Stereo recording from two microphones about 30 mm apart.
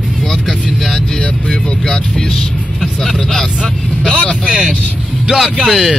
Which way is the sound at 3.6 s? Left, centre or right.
Left.